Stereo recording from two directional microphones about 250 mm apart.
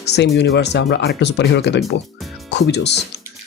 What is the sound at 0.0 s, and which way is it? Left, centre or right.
Speech, left.